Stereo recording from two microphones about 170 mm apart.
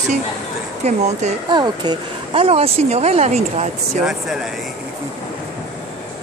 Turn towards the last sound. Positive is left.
turn(degrees=0)  # may be behind; listen again after turning